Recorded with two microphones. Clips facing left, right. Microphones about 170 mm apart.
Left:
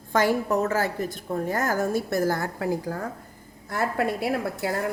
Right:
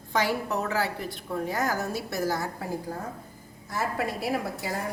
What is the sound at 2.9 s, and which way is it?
Speech, 90° left.